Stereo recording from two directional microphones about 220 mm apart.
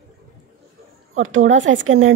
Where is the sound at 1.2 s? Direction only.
65° right (ahead or behind).